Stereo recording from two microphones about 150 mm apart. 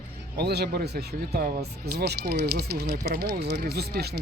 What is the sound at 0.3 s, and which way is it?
Speech, 90° right.